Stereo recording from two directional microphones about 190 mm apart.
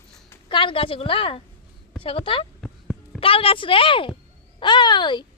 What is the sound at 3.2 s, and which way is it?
A woman's voice, 30° left (ahead or behind).